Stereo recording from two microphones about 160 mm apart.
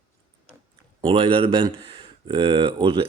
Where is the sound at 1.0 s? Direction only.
35° right (ahead or behind).